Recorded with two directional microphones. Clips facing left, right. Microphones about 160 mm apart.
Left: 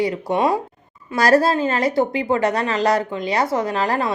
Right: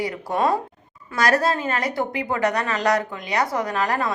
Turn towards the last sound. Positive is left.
turn(degrees=25)  # may be behind; listen again after turning